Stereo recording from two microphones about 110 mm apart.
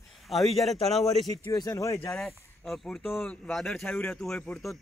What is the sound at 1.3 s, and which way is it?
Speech, 35° left (ahead or behind).